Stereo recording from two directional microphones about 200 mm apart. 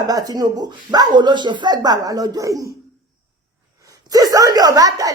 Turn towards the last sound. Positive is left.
turn(degrees=-15)  # may be behind; listen again after turning